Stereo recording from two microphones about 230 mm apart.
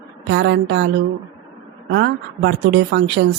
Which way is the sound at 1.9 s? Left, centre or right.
Right.